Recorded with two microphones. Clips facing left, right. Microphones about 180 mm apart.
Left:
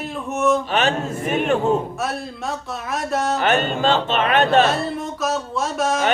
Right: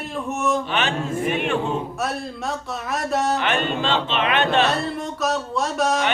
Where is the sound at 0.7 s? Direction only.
40° left (ahead or behind).